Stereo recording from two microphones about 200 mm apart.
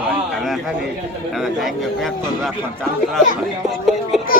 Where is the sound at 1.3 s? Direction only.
Centre (ahead or behind).